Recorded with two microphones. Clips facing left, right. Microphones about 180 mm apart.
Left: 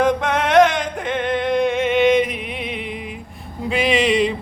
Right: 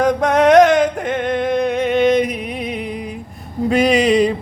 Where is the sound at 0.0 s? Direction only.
40° right (ahead or behind).